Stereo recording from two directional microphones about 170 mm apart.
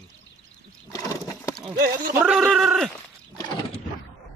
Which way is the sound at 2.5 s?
Centre (ahead or behind).